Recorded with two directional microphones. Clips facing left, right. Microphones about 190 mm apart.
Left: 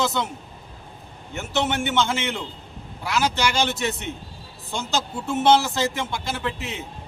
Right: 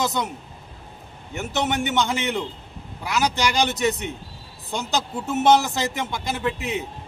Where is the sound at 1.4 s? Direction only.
15° right (ahead or behind).